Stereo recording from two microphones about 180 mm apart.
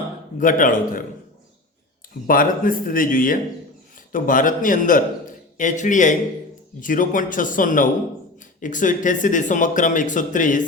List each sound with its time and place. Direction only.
0.3 s speech: 45° left (ahead or behind)
2.2 s speech: 50° left (ahead or behind)